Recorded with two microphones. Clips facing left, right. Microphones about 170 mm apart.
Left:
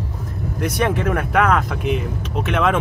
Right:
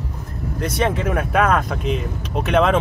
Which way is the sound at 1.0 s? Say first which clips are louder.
Even; 15° right (ahead or behind).